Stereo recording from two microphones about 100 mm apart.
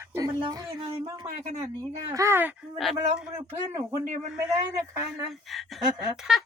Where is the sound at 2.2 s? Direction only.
25° right (ahead or behind).